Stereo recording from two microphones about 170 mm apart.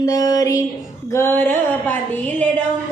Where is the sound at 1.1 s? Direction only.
15° left (ahead or behind).